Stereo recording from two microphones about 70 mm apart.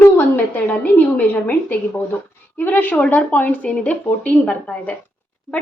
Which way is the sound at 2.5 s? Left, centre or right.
Left.